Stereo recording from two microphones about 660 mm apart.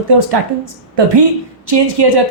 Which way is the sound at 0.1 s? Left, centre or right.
Right.